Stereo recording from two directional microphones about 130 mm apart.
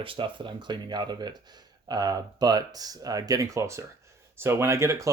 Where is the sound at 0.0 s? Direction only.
40° right (ahead or behind).